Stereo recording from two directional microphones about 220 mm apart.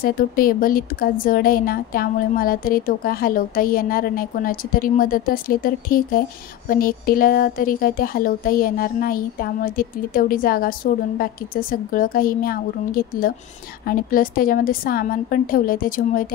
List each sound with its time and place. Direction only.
0.0 s speech: 40° left (ahead or behind)